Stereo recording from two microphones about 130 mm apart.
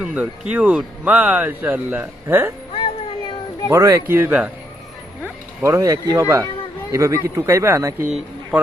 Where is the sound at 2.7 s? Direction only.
40° left (ahead or behind).